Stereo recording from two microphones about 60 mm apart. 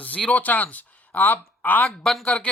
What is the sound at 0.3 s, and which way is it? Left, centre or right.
Speech, left.